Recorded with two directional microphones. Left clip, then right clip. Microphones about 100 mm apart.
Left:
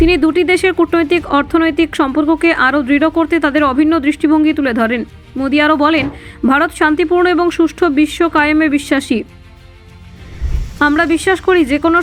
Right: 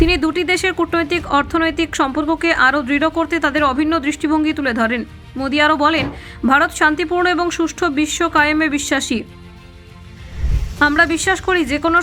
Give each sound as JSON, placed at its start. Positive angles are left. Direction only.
{"t": 0.0, "sound": "speech", "side_deg": 30}
{"t": 10.8, "sound": "speech", "side_deg": 35}